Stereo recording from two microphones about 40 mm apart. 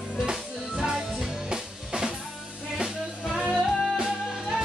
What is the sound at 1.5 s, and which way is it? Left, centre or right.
Drum kit, centre.